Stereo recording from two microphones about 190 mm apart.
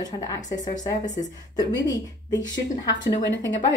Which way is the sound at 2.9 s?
70° left (ahead or behind).